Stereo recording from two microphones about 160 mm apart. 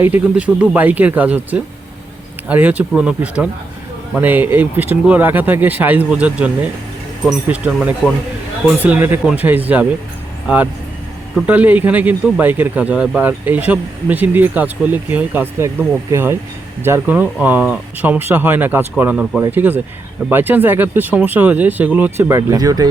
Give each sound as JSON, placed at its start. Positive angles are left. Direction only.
{"t": 0.0, "sound": "speech", "side_deg": -10}
{"t": 22.4, "sound": "speech", "side_deg": -20}